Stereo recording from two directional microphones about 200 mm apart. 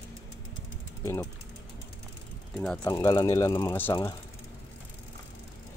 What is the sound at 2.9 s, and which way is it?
Speech, 20° left (ahead or behind).